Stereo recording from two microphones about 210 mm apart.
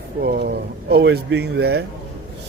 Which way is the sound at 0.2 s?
45° right (ahead or behind).